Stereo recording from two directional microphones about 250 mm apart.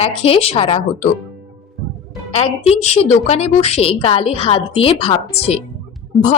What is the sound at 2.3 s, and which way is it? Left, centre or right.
A woman's voice, left.